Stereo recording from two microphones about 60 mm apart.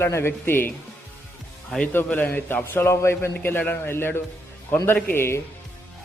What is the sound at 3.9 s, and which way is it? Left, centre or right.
Speech, left.